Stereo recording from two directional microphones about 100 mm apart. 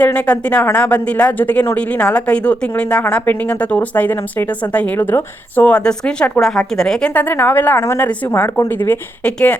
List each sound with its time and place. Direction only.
0.0 s speech: 15° left (ahead or behind)
7.1 s a woman's voice: 15° left (ahead or behind)